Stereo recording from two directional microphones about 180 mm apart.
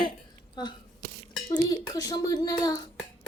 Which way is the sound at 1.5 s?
20° left (ahead or behind).